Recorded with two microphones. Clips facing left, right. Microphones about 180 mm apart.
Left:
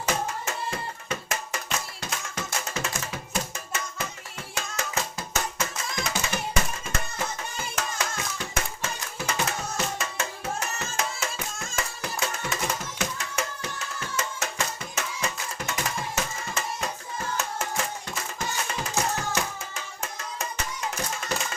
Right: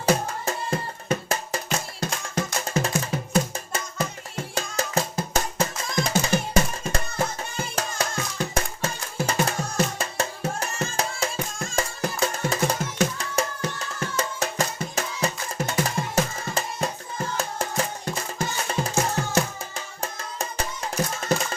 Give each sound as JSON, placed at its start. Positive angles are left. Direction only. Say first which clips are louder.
{"t": 0.0, "sound": "music", "louder": "right 5 dB", "side_deg": -35}
{"t": 8.5, "sound": "music", "louder": "right 4 dB", "side_deg": -35}